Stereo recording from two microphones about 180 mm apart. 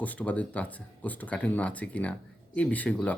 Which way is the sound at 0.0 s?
10° left (ahead or behind).